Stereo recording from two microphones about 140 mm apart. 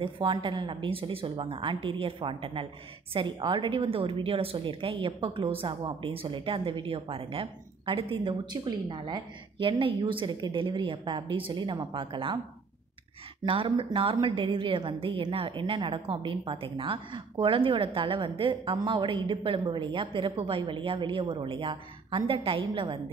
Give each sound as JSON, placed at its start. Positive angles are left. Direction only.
{"t": 0.0, "sound": "a woman's voice", "side_deg": -35}
{"t": 13.4, "sound": "a woman's voice", "side_deg": -35}